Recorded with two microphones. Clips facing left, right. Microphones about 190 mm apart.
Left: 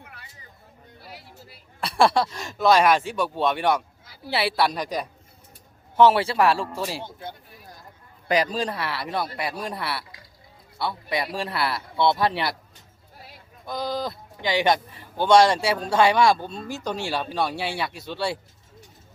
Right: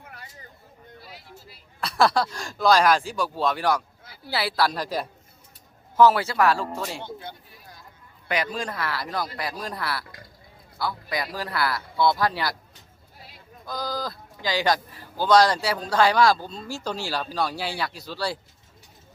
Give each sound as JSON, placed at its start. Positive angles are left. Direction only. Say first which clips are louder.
{"t": 1.8, "sound": "a sound", "louder": "left 2 dB", "side_deg": 30}
{"t": 2.2, "sound": "speech", "louder": "left 1 dB", "side_deg": 5}
{"t": 3.2, "sound": "speech", "louder": "left 2 dB", "side_deg": 25}
{"t": 4.7, "sound": "speech", "louder": "even", "side_deg": -5}
{"t": 6.0, "sound": "speech", "louder": "left 1 dB", "side_deg": 30}
{"t": 6.9, "sound": "speech", "louder": "left 1 dB", "side_deg": 40}
{"t": 8.5, "sound": "speech", "louder": "left 2 dB", "side_deg": 30}
{"t": 13.7, "sound": "speech", "louder": "left 3 dB", "side_deg": 25}